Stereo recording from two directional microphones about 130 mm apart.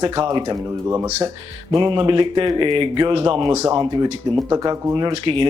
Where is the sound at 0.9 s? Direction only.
20° right (ahead or behind).